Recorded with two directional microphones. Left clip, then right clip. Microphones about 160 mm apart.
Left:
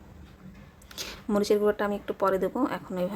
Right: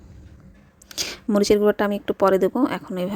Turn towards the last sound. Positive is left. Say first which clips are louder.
# right 5 dB
turn(degrees=-40)  # may be behind; listen again after turning